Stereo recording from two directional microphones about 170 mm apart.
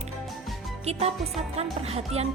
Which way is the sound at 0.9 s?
40° right (ahead or behind).